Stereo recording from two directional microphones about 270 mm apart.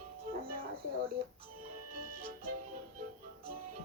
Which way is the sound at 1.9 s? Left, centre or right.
Right.